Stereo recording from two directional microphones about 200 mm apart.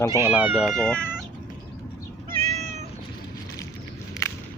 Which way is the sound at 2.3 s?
30° right (ahead or behind).